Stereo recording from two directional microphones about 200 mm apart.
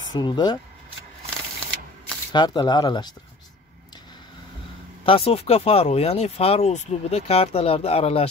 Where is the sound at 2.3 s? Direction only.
20° left (ahead or behind).